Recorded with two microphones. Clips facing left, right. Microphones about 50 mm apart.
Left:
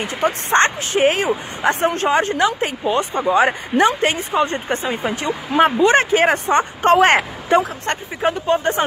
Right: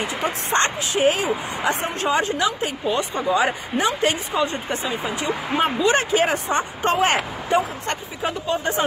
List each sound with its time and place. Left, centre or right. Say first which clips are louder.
0.0 s speech: left 4 dB; left
7.0 s speech: left 6 dB; left